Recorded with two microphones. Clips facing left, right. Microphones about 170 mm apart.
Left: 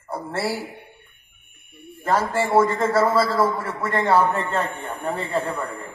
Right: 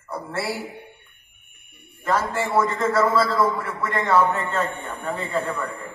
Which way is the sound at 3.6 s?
30° left (ahead or behind).